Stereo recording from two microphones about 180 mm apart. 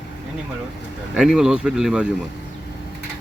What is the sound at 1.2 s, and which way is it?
Speech, 5° right (ahead or behind).